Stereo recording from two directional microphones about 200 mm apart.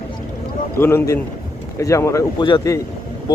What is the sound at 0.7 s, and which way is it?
Speech, 10° left (ahead or behind).